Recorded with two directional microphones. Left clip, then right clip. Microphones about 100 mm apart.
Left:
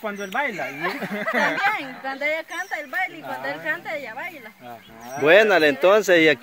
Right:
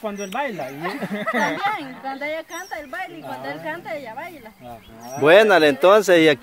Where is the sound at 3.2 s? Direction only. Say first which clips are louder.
Left 2 dB; 25° left (ahead or behind).